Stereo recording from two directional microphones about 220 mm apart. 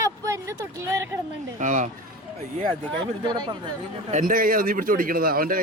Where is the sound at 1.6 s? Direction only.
35° right (ahead or behind).